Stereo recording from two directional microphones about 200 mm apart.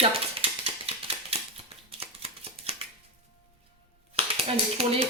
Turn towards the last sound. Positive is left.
turn(degrees=-30)  # may be behind; listen again after turning